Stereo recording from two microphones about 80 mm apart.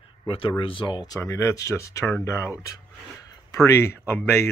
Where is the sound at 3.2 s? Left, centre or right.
Left.